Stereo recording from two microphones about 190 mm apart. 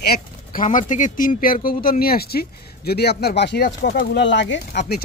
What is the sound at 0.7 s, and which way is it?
Speech, 40° left (ahead or behind).